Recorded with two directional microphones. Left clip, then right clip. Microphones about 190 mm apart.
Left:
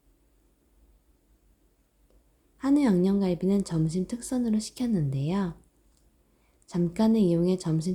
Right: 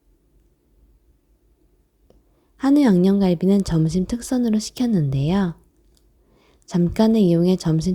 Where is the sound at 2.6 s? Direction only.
35° right (ahead or behind).